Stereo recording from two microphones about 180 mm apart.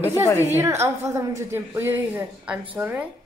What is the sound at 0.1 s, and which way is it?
Speech, 15° left (ahead or behind).